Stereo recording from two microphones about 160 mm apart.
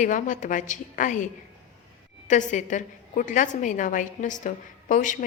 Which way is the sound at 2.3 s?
50° left (ahead or behind).